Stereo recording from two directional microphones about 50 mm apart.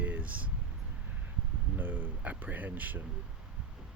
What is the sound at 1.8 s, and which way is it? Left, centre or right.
Speech, right.